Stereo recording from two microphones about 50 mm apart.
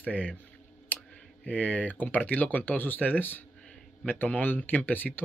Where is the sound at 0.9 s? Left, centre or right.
Left.